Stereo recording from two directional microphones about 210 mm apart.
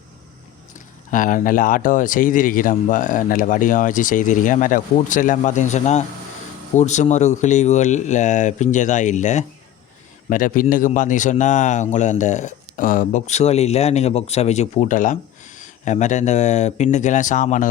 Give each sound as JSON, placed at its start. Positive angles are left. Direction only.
{"t": 1.1, "sound": "speech", "side_deg": 40}